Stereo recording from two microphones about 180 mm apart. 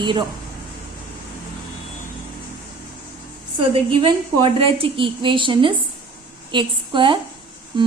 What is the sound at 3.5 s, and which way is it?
A woman's voice, 30° right (ahead or behind).